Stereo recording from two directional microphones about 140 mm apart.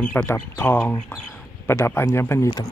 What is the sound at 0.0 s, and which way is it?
Speech, 10° left (ahead or behind).